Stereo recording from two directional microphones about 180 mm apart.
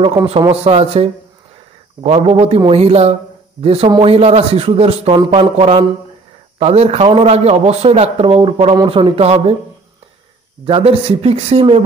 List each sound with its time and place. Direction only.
0.5 s a man's voice: 35° right (ahead or behind)
10.6 s a man's voice: 30° right (ahead or behind)